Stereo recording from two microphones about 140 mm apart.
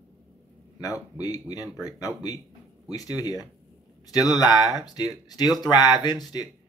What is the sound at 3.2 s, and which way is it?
Speech, 25° left (ahead or behind).